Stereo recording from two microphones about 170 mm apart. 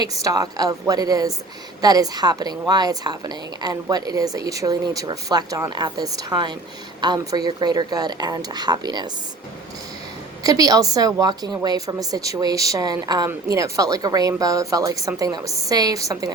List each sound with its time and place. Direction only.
0.0 s a woman's voice: 20° right (ahead or behind)
10.4 s a woman's voice: 20° right (ahead or behind)